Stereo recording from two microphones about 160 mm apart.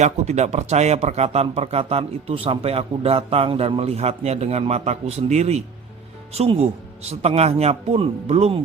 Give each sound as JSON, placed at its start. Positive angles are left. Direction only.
{"t": 0.0, "sound": "a man's voice", "side_deg": -45}